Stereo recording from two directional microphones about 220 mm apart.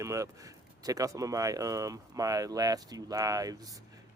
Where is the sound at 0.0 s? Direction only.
15° right (ahead or behind).